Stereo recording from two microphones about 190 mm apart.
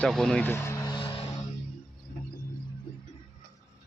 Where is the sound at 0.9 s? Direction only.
30° left (ahead or behind).